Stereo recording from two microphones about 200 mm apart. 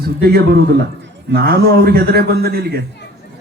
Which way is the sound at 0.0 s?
50° right (ahead or behind).